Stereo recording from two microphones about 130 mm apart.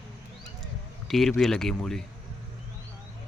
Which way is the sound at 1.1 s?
5° left (ahead or behind).